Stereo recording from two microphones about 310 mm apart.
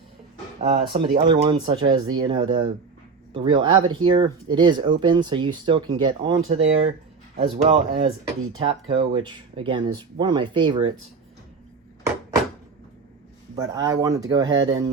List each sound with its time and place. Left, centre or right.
0.6 s speech: centre
13.6 s speech: centre